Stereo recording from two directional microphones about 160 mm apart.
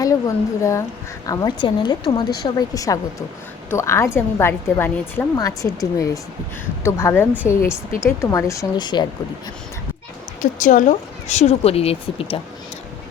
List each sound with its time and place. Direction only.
0.0 s a woman's voice: 20° left (ahead or behind)
6.8 s a woman's voice: 15° left (ahead or behind)
10.4 s speech: 50° left (ahead or behind); by 12.4 s 35° left (ahead or behind)